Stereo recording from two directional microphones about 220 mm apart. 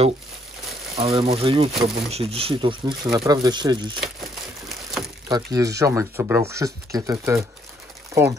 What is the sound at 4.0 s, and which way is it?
Crushing, centre (ahead or behind).